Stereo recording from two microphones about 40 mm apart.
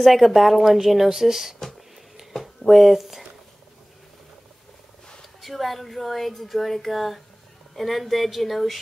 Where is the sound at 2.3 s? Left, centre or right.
Centre.